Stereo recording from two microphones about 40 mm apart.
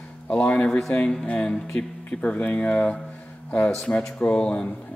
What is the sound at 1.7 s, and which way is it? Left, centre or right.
Speech, left.